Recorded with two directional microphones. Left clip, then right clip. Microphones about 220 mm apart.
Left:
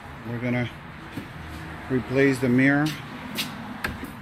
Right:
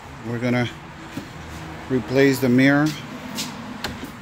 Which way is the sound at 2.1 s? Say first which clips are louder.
Right 4 dB; 15° right (ahead or behind).